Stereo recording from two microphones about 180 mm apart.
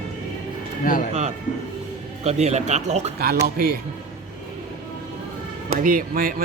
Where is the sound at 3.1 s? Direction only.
60° right (ahead or behind).